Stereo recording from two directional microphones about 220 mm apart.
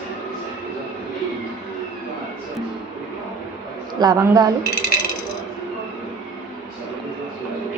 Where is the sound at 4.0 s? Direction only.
15° right (ahead or behind).